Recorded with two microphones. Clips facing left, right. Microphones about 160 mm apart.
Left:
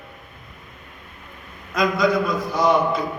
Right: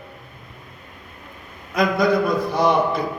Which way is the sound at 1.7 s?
60° right (ahead or behind).